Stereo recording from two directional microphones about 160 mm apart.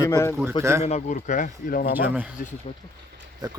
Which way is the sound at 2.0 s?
10° right (ahead or behind).